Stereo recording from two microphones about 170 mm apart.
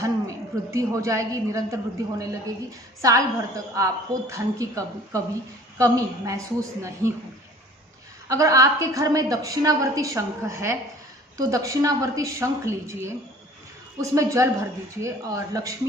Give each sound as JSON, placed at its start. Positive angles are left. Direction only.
{"t": 0.0, "sound": "a woman's voice", "side_deg": -20}
{"t": 8.3, "sound": "a woman's voice", "side_deg": -20}